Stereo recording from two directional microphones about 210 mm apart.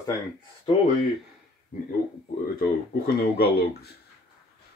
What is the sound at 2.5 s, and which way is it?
Speech, 45° left (ahead or behind).